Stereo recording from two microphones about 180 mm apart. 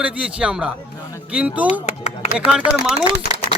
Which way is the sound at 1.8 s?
35° left (ahead or behind).